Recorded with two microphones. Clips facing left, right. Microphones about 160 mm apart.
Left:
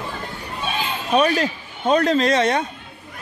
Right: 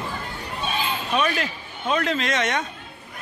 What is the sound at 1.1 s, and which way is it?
Speech, 35° left (ahead or behind).